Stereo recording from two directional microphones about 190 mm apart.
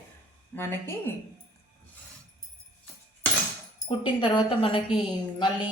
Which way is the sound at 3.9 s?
25° left (ahead or behind).